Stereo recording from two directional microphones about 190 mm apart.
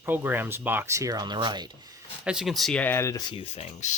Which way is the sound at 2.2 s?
Centre (ahead or behind).